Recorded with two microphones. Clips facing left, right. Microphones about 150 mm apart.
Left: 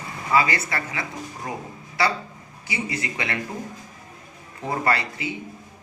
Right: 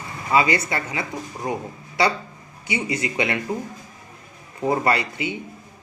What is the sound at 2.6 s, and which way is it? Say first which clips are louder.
Speech: right 4 dB; 20° right (ahead or behind).